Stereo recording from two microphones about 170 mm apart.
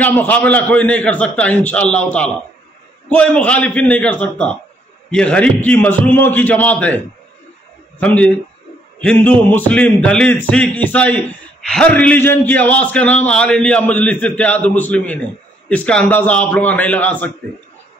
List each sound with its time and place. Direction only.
0.0 s a man's voice: 10° left (ahead or behind)
8.0 s a man's voice: 5° left (ahead or behind)